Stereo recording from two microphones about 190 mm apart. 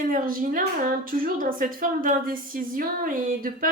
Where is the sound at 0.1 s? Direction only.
50° right (ahead or behind).